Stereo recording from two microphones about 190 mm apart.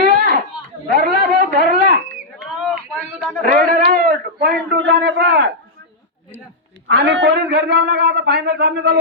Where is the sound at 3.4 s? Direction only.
50° right (ahead or behind); by 5.5 s 65° right (ahead or behind).